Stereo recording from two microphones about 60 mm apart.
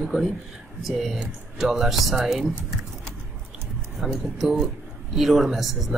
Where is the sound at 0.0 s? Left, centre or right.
Centre.